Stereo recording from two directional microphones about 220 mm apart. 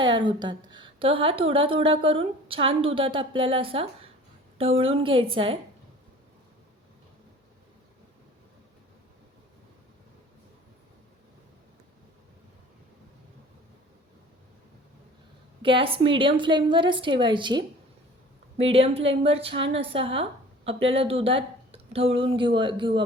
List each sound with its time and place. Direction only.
0.0 s a woman's voice: 20° right (ahead or behind)
15.6 s a woman's voice: 25° right (ahead or behind)
18.7 s a woman's voice: 25° right (ahead or behind)